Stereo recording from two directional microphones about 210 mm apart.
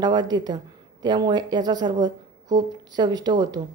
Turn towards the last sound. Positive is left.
turn(degrees=-20)  # may be behind; listen again after turning